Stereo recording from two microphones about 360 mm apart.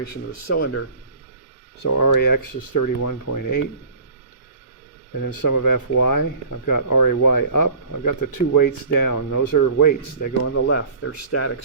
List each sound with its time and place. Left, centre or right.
0.0 s speech: left
0.6 s speech: left
1.8 s speech: left
5.4 s speech: left
10.5 s speech: left